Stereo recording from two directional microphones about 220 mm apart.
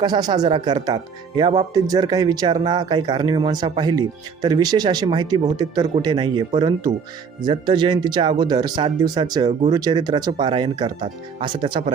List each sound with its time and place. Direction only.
0.0 s speech: 20° right (ahead or behind)